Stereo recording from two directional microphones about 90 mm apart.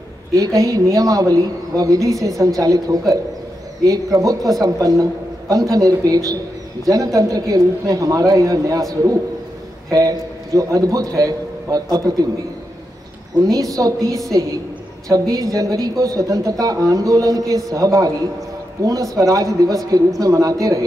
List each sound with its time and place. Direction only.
0.4 s a woman's voice: 40° right (ahead or behind)
9.8 s a man's voice: 40° right (ahead or behind)
13.5 s a woman's voice: 40° right (ahead or behind)
19.1 s a woman's voice: 40° right (ahead or behind)